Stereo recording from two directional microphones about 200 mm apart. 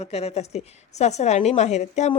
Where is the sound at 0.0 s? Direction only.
30° left (ahead or behind).